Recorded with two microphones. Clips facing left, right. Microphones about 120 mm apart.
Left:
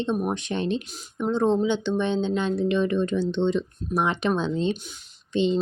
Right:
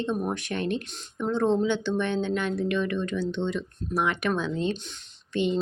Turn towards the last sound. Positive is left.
turn(degrees=25)  # may be behind; listen again after turning